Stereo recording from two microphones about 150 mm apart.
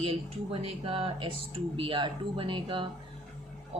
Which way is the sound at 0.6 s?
40° right (ahead or behind).